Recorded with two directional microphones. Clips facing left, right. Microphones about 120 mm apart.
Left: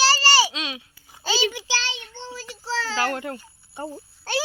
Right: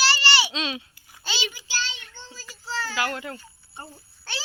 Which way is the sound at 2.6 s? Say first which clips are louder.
Left 3 dB; 90° left.